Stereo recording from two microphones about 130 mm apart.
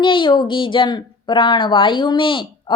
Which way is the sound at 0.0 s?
40° left (ahead or behind).